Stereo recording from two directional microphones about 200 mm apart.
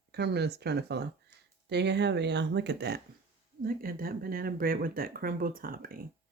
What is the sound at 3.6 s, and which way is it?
Speech, 45° right (ahead or behind).